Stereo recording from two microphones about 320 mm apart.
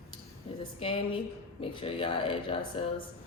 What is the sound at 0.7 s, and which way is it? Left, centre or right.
Speech, centre.